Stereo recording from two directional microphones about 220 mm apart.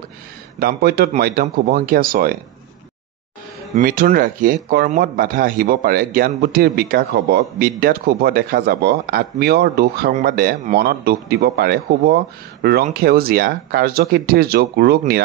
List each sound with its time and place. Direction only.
0.6 s speech: 45° right (ahead or behind)
3.7 s speech: 40° right (ahead or behind)